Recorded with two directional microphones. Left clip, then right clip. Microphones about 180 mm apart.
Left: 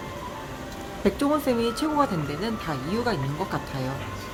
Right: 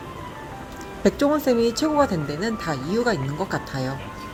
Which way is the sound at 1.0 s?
15° right (ahead or behind).